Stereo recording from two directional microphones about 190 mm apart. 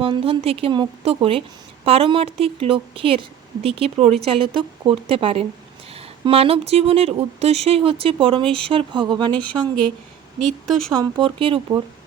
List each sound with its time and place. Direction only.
0.0 s a woman's voice: 30° right (ahead or behind)
10.7 s speech: centre (ahead or behind)
10.9 s a woman's voice: 20° right (ahead or behind)